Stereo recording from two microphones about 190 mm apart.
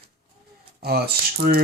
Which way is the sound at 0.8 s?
55° right (ahead or behind).